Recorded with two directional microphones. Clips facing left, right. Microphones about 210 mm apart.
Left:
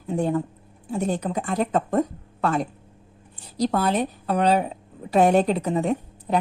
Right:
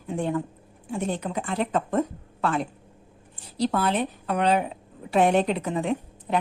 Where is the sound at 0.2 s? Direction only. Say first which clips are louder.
Left 3 dB; 40° left (ahead or behind).